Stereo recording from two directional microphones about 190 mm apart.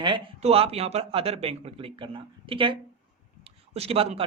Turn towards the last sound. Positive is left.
turn(degrees=-30)  # may be behind; listen again after turning